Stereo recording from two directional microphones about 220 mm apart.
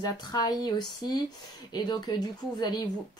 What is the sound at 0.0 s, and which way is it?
A woman's voice, 15° left (ahead or behind).